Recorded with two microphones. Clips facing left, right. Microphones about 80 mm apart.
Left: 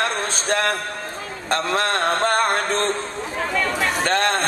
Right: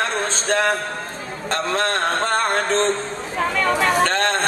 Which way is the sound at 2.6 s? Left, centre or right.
Right.